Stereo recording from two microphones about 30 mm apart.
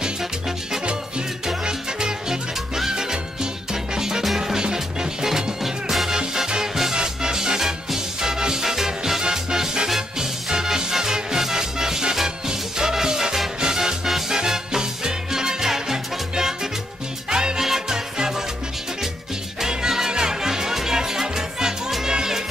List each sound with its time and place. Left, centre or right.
1.6 s music: right
6.1 s music: right
17.3 s music: right
17.6 s music: centre
19.6 s music: centre